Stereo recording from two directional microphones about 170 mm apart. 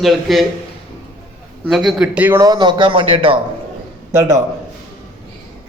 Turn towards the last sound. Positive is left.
turn(degrees=-15)  # may be behind; listen again after turning